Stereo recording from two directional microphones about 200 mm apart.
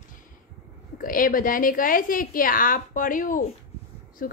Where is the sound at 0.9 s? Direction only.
45° left (ahead or behind).